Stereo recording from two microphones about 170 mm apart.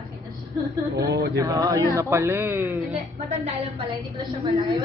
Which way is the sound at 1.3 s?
20° right (ahead or behind).